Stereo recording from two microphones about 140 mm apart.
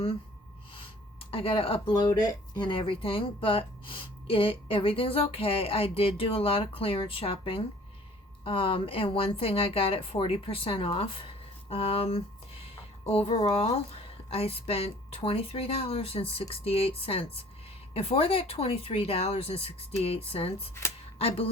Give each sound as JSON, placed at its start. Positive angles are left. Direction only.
{"t": 1.3, "sound": "speech", "side_deg": 40}
{"t": 2.0, "sound": "speech", "side_deg": 30}